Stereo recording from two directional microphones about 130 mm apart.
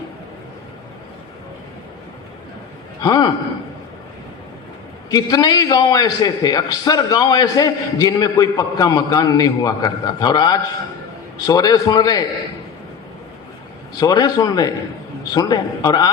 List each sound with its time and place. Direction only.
3.0 s a man's voice: 35° left (ahead or behind)
5.1 s a man's voice: 30° left (ahead or behind)
14.0 s a man's voice: 30° left (ahead or behind)